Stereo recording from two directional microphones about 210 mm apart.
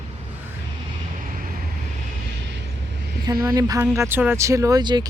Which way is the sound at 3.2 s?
15° right (ahead or behind).